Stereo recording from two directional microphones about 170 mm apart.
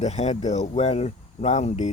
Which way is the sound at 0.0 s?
40° left (ahead or behind).